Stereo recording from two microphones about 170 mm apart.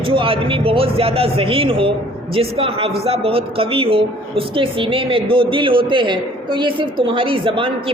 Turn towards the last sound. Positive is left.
turn(degrees=-30)  # may be behind; listen again after turning